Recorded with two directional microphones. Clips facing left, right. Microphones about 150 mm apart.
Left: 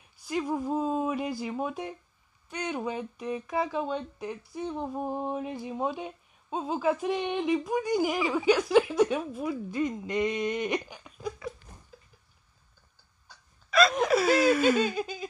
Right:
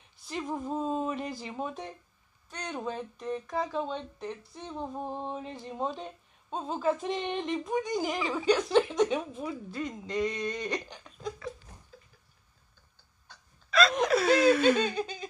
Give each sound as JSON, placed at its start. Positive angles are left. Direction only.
{"t": 0.2, "sound": "speech", "side_deg": 5}
{"t": 11.1, "sound": "a sound", "side_deg": 5}
{"t": 13.7, "sound": "laughter", "side_deg": 10}